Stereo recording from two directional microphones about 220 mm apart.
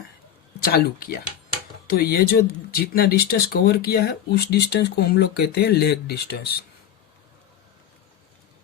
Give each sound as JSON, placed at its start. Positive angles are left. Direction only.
{"t": 0.6, "sound": "speech", "side_deg": 45}